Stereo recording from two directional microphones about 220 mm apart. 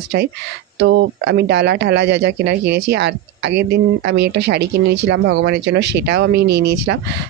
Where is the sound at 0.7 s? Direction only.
50° right (ahead or behind).